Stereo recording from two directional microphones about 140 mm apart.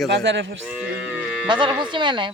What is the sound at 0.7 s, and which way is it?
Cattle, 10° right (ahead or behind).